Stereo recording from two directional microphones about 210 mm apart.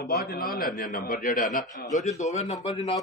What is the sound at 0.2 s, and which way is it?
A man's voice, 45° left (ahead or behind).